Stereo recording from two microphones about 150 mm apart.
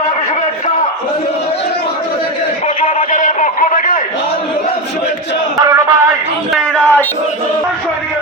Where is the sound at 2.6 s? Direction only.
55° left (ahead or behind).